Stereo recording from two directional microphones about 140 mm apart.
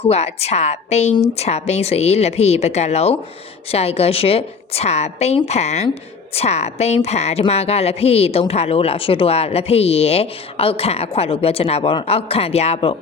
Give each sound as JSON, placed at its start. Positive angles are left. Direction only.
{"t": 0.0, "sound": "a woman's voice", "side_deg": 50}